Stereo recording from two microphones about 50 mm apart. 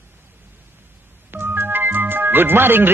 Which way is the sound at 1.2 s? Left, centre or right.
Right.